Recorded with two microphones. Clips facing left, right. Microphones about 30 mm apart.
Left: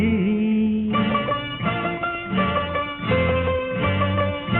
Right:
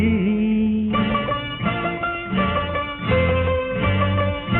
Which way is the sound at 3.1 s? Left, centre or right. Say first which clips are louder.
Right 1 dB; right.